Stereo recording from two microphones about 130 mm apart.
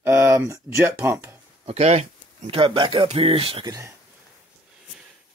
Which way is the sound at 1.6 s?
55° right (ahead or behind).